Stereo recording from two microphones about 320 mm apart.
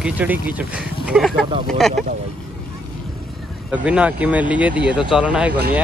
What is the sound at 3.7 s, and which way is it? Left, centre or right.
Speech, centre.